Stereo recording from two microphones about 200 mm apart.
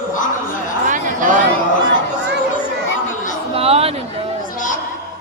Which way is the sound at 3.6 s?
30° right (ahead or behind).